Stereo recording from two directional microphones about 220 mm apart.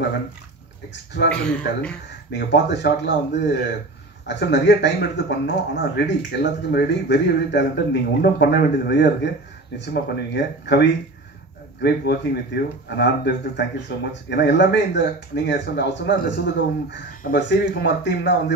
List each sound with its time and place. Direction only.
1.3 s speech: 5° left (ahead or behind)
2.3 s speech: 50° left (ahead or behind)